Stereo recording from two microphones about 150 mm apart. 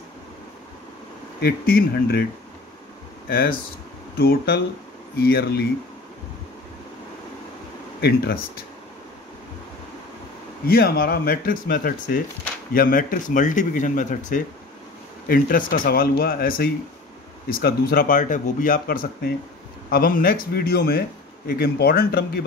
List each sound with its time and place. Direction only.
1.4 s speech: 85° left
3.3 s speech: 90° left
8.0 s speech: 90° left
10.7 s speech: 85° left; by 14.4 s 60° left (ahead or behind)
15.2 s speech: 70° left (ahead or behind); by 22.4 s 85° left